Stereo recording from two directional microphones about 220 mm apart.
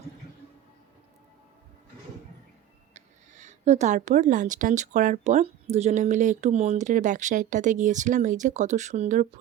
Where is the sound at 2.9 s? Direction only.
30° right (ahead or behind).